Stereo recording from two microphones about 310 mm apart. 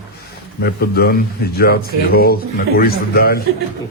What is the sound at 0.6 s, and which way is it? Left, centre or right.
A man's voice, left.